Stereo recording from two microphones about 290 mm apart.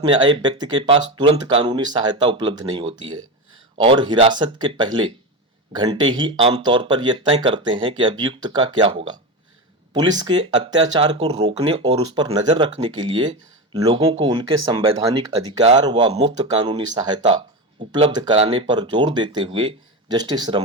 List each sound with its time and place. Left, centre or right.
0.0 s speech: centre